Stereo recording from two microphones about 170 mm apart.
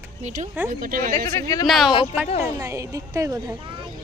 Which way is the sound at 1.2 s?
20° left (ahead or behind).